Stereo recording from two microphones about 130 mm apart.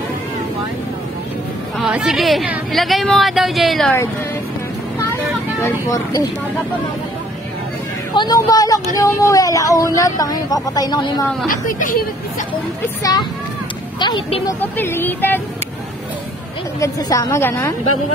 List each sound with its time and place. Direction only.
1.8 s a woman's voice: 5° right (ahead or behind)
5.6 s speech: 25° left (ahead or behind)
8.1 s speech: 35° left (ahead or behind)
11.5 s speech: 90° left
13.0 s speech: 30° left (ahead or behind)
14.6 s speech: 15° left (ahead or behind)
16.8 s speech: 25° left (ahead or behind)